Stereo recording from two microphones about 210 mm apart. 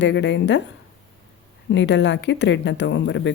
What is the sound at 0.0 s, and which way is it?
Speech, 55° left (ahead or behind).